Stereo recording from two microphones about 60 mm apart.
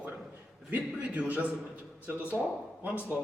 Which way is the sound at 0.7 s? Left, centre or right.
Right.